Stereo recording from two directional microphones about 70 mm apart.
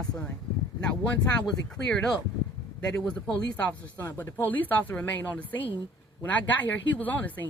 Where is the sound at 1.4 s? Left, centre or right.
Centre.